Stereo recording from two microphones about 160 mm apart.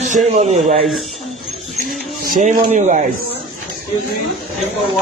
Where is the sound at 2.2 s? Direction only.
55° right (ahead or behind).